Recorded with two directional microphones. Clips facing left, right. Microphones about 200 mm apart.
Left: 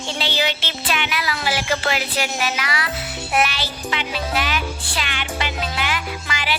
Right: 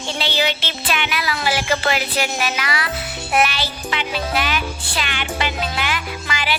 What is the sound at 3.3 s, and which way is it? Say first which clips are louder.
Music: right 2 dB; 55° right (ahead or behind).